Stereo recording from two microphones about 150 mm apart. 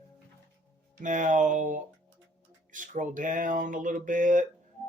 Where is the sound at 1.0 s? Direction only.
60° right (ahead or behind).